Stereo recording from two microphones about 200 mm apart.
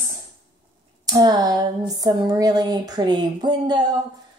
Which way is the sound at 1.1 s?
20° right (ahead or behind).